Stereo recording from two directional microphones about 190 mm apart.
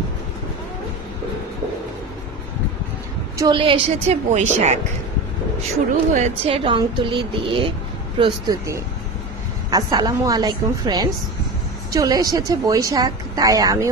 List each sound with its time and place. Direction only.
3.3 s a woman's voice: 25° right (ahead or behind)
6.1 s speech: 35° right (ahead or behind); by 13.8 s 20° right (ahead or behind)